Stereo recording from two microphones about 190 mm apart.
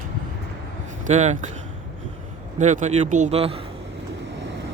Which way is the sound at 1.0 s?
40° right (ahead or behind).